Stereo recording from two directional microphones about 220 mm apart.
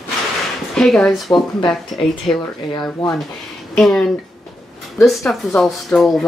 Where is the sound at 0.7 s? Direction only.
Centre (ahead or behind).